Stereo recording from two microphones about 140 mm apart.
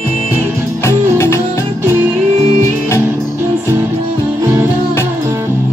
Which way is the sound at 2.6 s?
20° left (ahead or behind).